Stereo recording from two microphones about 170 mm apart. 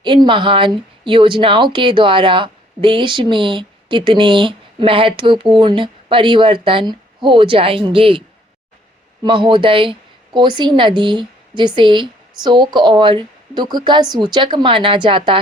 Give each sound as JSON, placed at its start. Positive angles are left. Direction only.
{"t": 0.0, "sound": "speech", "side_deg": -25}
{"t": 9.2, "sound": "speech", "side_deg": -30}